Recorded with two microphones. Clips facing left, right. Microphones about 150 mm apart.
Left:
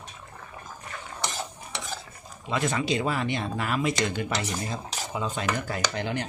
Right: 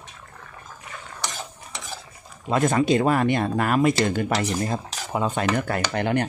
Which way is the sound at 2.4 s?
50° right (ahead or behind).